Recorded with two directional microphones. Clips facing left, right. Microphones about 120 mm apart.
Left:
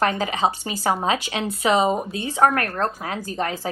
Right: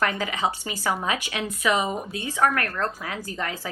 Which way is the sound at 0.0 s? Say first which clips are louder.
Left 4 dB; 25° left (ahead or behind).